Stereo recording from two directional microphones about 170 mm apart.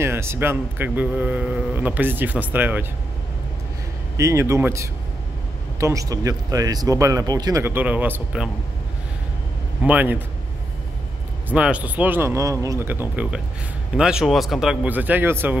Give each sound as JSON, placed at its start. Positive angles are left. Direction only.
{"t": 0.0, "sound": "speech", "side_deg": -15}
{"t": 4.2, "sound": "speech", "side_deg": -15}
{"t": 9.8, "sound": "speech", "side_deg": -10}
{"t": 11.4, "sound": "speech", "side_deg": -5}